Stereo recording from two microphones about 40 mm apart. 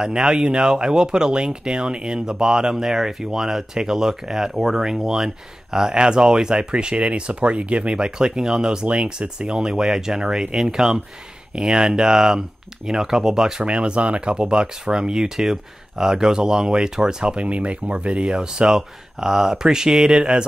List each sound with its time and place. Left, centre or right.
0.0 s speech: right
8.8 s speech: right